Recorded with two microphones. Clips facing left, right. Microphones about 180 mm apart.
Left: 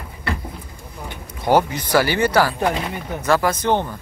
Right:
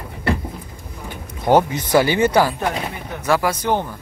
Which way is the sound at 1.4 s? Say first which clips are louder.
Right 2 dB; 20° right (ahead or behind).